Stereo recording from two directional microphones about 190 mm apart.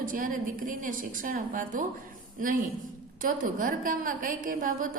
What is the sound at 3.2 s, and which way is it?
A woman's voice, 45° right (ahead or behind).